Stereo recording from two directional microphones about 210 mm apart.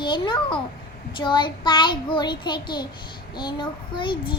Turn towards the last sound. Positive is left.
turn(degrees=25)  # may be behind; listen again after turning